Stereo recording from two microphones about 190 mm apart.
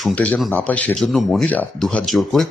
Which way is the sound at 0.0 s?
5° left (ahead or behind).